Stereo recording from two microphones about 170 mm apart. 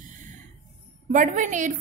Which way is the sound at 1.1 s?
50° right (ahead or behind).